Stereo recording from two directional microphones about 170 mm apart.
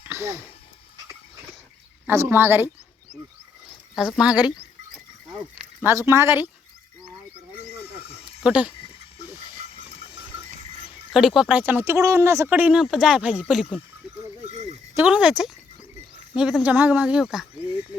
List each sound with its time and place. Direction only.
0.1 s a sound: 15° right (ahead or behind)
2.0 s speech: 10° right (ahead or behind)
3.7 s speech: centre (ahead or behind)
5.8 s speech: 15° right (ahead or behind)
8.0 s a sound: 35° left (ahead or behind)
8.4 s speech: 5° right (ahead or behind)
11.1 s speech: centre (ahead or behind)
14.4 s a sound: 40° right (ahead or behind)
14.9 s speech: 10° right (ahead or behind)